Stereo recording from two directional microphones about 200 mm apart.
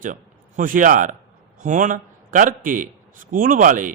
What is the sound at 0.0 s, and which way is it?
A man's voice, 40° right (ahead or behind).